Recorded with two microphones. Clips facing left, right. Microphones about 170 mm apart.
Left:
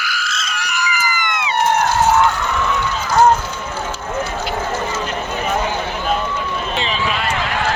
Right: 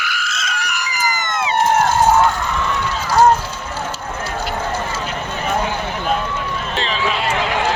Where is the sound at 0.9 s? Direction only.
40° right (ahead or behind).